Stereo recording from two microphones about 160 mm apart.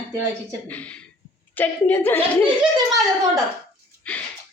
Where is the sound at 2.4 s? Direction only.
25° right (ahead or behind).